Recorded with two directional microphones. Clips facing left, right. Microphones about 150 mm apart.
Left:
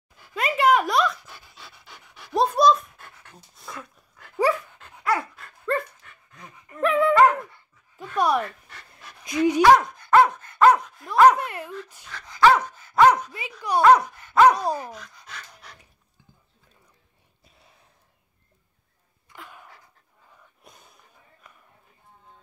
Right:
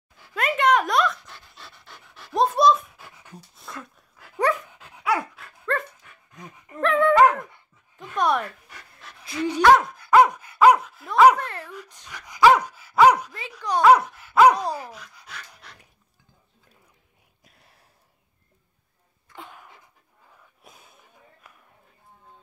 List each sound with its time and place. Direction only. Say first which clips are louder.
0.2 s pant: left 1 dB; centre (ahead or behind)
3.5 s dog: left 1 dB; centre (ahead or behind)
4.6 s dog: even; 10° right (ahead or behind)
9.2 s speech: left 2 dB; 15° left (ahead or behind)
9.8 s dog: right 1 dB; 5° right (ahead or behind)
11.3 s a sound: left 1 dB; 10° left (ahead or behind)
12.1 s dog: right 1 dB; 15° right (ahead or behind)
13.6 s dog: left 1 dB; 10° left (ahead or behind)
13.8 s dog: right 1 dB; 5° right (ahead or behind)
19.3 s sneeze: right 2 dB; 25° right (ahead or behind)
20.6 s a sound: right 1 dB; 5° right (ahead or behind)